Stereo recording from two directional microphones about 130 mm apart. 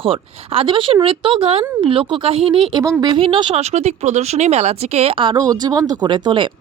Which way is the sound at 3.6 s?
55° right (ahead or behind).